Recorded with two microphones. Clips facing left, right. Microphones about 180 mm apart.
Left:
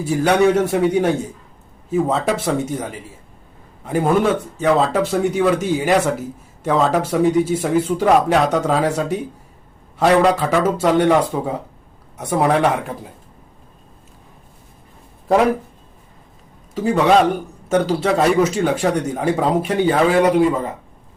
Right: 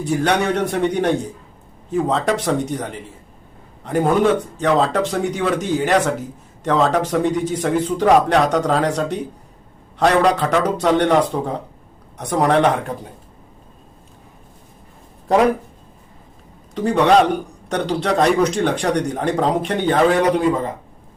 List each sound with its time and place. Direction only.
0.0 s speech: 5° left (ahead or behind)
16.7 s speech: 5° left (ahead or behind)